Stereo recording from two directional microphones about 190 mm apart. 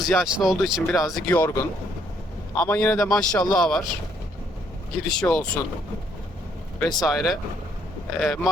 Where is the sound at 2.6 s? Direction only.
5° left (ahead or behind).